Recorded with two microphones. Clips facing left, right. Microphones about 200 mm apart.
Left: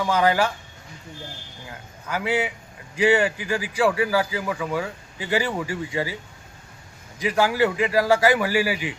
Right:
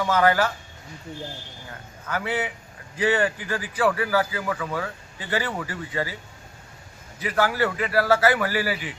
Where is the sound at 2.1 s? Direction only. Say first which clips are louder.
Left 3 dB; 10° left (ahead or behind).